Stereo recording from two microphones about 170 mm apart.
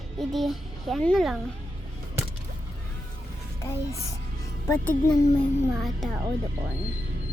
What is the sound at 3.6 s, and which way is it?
Speech, 15° left (ahead or behind).